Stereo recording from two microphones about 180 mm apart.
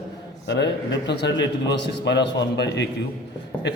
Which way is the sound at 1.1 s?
75° left (ahead or behind).